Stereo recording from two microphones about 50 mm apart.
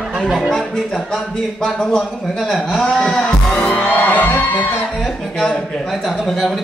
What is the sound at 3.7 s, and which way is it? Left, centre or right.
Music, left.